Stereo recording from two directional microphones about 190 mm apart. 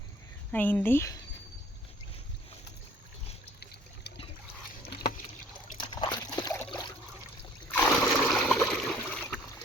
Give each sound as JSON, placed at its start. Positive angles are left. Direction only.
{"t": 0.5, "sound": "speech", "side_deg": 10}
{"t": 5.7, "sound": "liquid", "side_deg": 25}
{"t": 7.7, "sound": "water", "side_deg": 5}
{"t": 8.6, "sound": "a sound", "side_deg": 0}